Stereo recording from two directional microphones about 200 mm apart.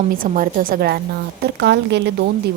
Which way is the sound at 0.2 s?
45° right (ahead or behind).